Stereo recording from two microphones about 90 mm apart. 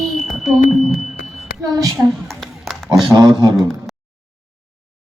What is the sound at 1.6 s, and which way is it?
Female singing, 45° right (ahead or behind).